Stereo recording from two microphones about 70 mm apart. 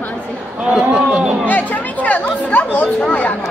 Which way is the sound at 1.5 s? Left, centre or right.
Left.